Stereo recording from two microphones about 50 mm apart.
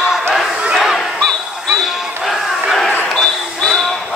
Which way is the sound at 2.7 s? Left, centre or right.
Centre.